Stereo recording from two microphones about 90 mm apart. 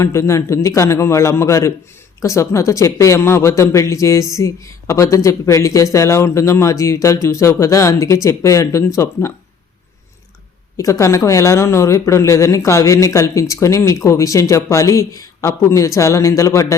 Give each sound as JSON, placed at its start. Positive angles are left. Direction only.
{"t": 0.0, "sound": "speech", "side_deg": 30}
{"t": 10.8, "sound": "speech", "side_deg": 35}